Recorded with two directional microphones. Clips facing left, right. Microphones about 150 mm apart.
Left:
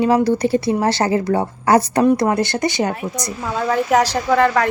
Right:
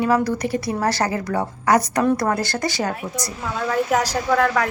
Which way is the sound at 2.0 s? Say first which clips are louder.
Left 4 dB; 20° left (ahead or behind).